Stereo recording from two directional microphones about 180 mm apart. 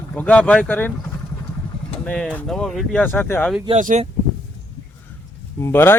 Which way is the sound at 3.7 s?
40° right (ahead or behind).